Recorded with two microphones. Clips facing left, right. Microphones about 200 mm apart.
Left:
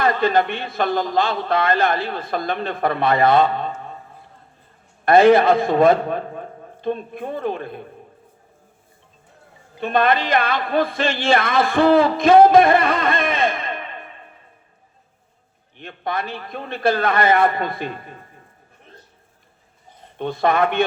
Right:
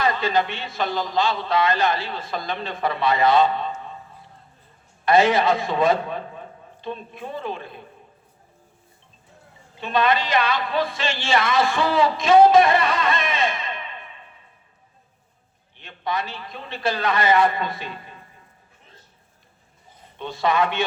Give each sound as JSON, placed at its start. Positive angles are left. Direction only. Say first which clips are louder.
{"t": 0.0, "sound": "a man's voice", "louder": "left 4 dB", "side_deg": 55}
{"t": 9.8, "sound": "speech", "louder": "left 3 dB", "side_deg": 55}
{"t": 15.8, "sound": "a man's voice", "louder": "left 2 dB", "side_deg": 55}
{"t": 20.1, "sound": "a man's voice", "louder": "left 3 dB", "side_deg": 55}